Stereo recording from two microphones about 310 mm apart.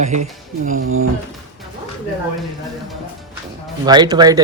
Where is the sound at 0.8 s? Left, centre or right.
Right.